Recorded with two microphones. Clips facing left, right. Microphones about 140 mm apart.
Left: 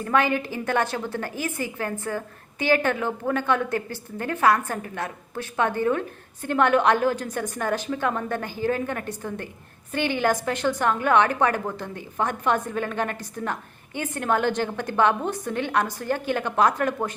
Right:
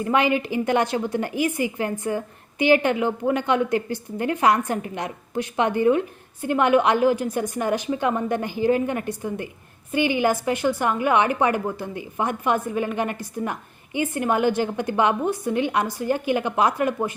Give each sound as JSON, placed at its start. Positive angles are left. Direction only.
{"t": 0.0, "sound": "a woman's voice", "side_deg": -15}